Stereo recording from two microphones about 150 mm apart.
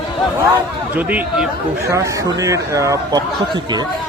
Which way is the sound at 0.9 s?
10° right (ahead or behind).